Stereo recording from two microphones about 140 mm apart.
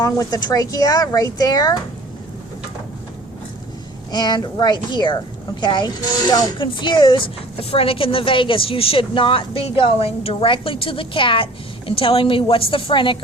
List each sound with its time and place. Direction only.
0.0 s speech: 25° left (ahead or behind)
4.1 s a woman's voice: 30° left (ahead or behind)